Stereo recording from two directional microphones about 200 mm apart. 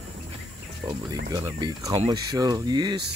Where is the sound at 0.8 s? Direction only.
20° right (ahead or behind).